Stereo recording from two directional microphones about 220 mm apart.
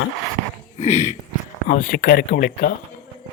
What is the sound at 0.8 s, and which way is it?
Speech, 30° left (ahead or behind).